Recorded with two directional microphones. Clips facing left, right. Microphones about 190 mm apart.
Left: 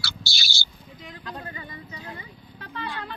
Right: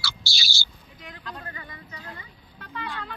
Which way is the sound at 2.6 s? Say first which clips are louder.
Left 1 dB; 30° left (ahead or behind).